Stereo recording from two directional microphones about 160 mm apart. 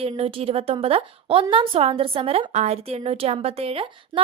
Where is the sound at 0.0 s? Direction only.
35° right (ahead or behind).